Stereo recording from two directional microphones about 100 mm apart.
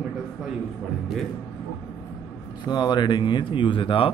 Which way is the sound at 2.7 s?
45° left (ahead or behind).